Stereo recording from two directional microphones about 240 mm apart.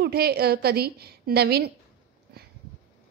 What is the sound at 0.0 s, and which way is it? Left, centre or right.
A woman's voice, right.